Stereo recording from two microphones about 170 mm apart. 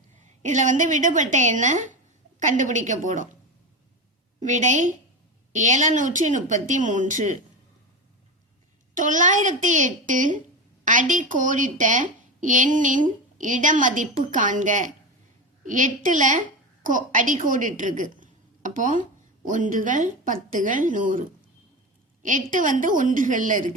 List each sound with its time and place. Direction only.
0.2 s a woman's voice: 45° right (ahead or behind)
4.4 s a woman's voice: 45° right (ahead or behind)
9.0 s a woman's voice: 50° right (ahead or behind)